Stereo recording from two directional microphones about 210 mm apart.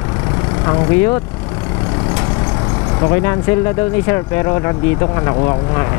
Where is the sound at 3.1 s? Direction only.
15° left (ahead or behind).